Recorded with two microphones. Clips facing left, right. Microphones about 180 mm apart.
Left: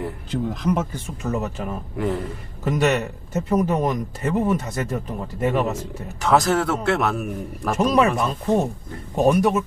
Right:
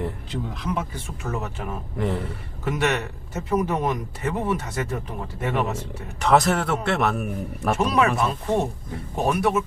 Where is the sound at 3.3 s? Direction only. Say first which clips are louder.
Left 3 dB; 40° left (ahead or behind).